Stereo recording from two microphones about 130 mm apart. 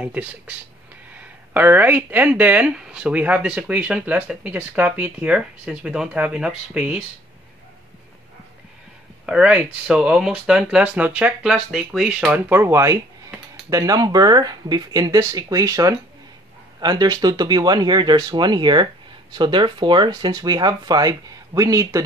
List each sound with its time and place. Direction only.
0.0 s speech: 10° right (ahead or behind)
9.2 s speech: 10° right (ahead or behind)
12.4 s speech: 15° right (ahead or behind)